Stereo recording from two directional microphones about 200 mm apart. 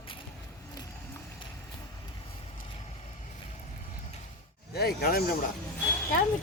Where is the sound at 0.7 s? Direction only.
20° left (ahead or behind).